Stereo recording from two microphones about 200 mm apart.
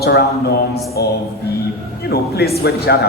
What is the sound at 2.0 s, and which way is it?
A man's voice, 50° left (ahead or behind).